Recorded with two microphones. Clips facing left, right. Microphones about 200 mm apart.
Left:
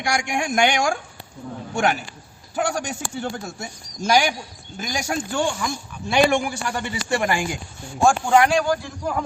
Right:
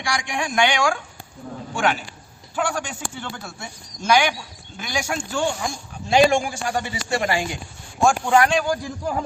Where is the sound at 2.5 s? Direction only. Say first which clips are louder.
Left 1 dB; 40° left (ahead or behind).